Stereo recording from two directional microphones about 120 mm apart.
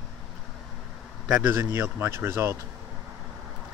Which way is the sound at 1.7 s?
20° right (ahead or behind).